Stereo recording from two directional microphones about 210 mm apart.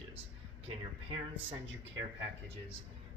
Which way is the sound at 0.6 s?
25° right (ahead or behind).